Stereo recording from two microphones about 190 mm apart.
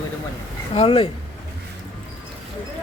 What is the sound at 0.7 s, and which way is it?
Speech, 30° left (ahead or behind).